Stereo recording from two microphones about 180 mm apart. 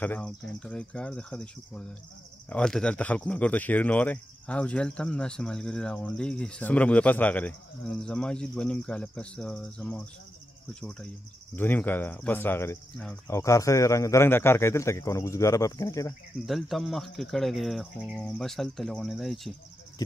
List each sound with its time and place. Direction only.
0.0 s speech: 5° left (ahead or behind)
12.9 s speech: 5° left (ahead or behind)
13.3 s speech: 15° left (ahead or behind)
16.4 s speech: centre (ahead or behind)